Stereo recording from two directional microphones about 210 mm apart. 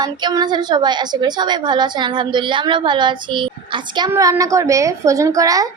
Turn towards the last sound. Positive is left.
turn(degrees=-15)  # may be behind; listen again after turning